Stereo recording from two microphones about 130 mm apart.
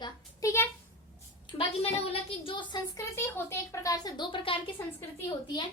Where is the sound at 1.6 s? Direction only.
50° left (ahead or behind).